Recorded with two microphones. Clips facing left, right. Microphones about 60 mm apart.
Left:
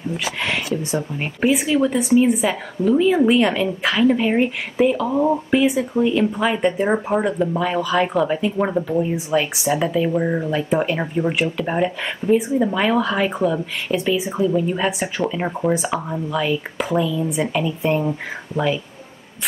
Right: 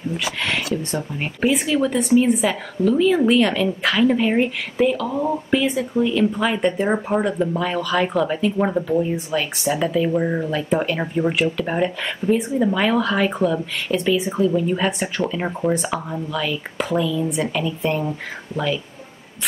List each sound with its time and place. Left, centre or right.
0.4 s speech: centre
2.8 s speech: centre
16.3 s speech: centre
16.7 s speech: centre